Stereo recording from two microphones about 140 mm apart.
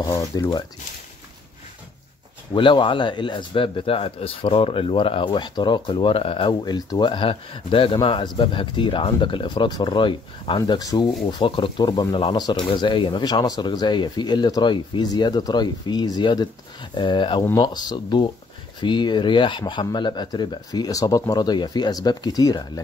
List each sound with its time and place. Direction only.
0.0 s speech: 25° left (ahead or behind)
2.5 s speech: 35° left (ahead or behind)
10.8 s speech: 25° left (ahead or behind)